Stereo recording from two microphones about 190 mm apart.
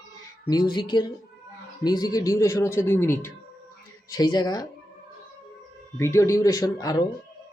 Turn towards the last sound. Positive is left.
turn(degrees=20)  # may be behind; listen again after turning